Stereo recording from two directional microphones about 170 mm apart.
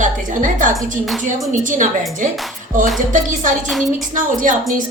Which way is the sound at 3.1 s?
50° right (ahead or behind).